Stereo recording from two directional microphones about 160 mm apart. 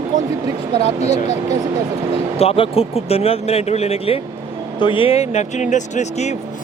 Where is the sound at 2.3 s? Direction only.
35° left (ahead or behind).